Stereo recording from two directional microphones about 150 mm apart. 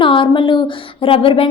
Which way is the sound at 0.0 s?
35° left (ahead or behind).